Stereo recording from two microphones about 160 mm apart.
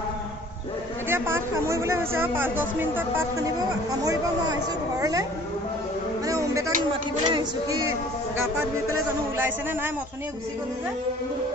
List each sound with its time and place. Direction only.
1.0 s speech: 15° right (ahead or behind)
6.2 s a sound: 20° right (ahead or behind)
6.9 s music: 30° right (ahead or behind)